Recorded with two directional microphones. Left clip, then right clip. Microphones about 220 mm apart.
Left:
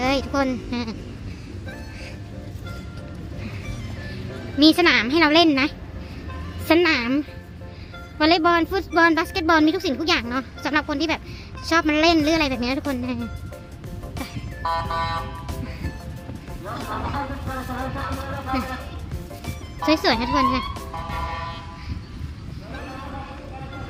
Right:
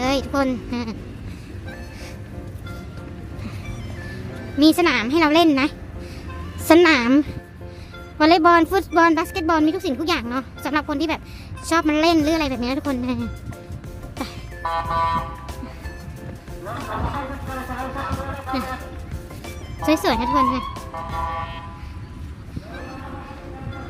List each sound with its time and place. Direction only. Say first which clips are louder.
0.0 s a woman's voice: right 1 dB; 5° right (ahead or behind)
4.5 s a woman's voice: left 1 dB; 10° right (ahead or behind)
14.6 s music: right 3 dB; 35° left (ahead or behind)
16.9 s music: even; 35° left (ahead or behind)
19.8 s speech: even; 10° right (ahead or behind)